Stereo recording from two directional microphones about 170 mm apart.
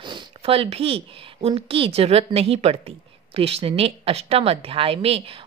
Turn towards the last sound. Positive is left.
turn(degrees=-35)  # may be behind; listen again after turning